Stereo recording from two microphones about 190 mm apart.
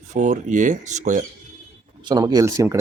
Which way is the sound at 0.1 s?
40° right (ahead or behind).